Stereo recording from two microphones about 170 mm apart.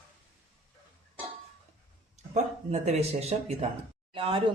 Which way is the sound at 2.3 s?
40° right (ahead or behind).